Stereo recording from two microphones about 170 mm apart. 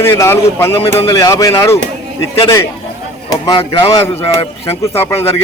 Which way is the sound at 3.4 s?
25° left (ahead or behind).